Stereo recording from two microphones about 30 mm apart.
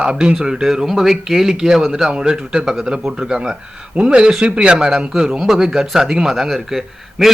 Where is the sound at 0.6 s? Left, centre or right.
Centre.